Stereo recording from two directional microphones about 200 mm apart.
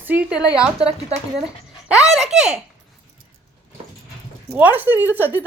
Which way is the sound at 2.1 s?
Centre (ahead or behind).